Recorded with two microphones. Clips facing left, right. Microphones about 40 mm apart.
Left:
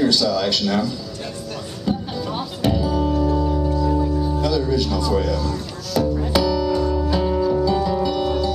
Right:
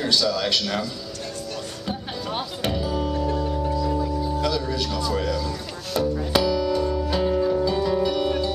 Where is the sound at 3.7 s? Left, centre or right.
Centre.